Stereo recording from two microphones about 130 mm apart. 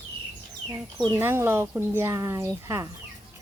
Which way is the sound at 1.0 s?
20° right (ahead or behind).